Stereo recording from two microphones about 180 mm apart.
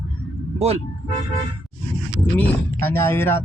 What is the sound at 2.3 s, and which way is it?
Speech, 10° left (ahead or behind).